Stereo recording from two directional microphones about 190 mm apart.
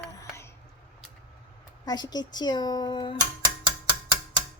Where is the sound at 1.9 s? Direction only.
20° left (ahead or behind).